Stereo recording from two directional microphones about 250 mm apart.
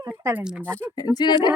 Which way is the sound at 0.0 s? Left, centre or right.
Centre.